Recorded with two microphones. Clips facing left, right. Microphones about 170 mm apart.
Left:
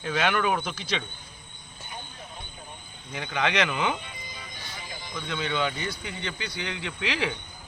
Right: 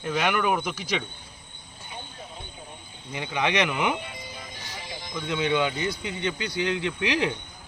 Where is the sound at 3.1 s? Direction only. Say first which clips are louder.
Right 1 dB; 15° right (ahead or behind).